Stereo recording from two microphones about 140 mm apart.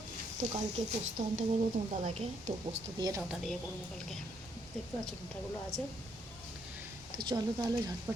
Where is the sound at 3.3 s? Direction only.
Centre (ahead or behind).